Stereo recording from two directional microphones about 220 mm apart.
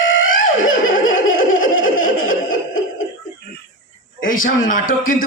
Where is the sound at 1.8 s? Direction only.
35° left (ahead or behind).